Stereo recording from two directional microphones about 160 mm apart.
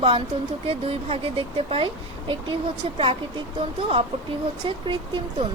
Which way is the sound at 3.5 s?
35° right (ahead or behind).